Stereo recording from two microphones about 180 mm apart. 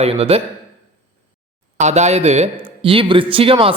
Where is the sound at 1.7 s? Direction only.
40° right (ahead or behind).